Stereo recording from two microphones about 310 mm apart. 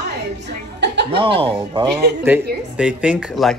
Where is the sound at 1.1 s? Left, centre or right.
Centre.